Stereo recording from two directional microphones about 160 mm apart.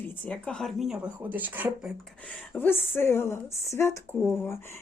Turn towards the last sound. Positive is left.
turn(degrees=15)  # may be behind; listen again after turning